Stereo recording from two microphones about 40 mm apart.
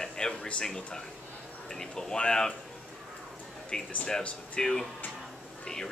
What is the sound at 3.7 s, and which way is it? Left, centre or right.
Speech, left.